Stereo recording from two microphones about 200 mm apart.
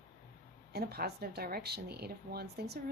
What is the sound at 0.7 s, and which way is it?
Speech, 50° right (ahead or behind).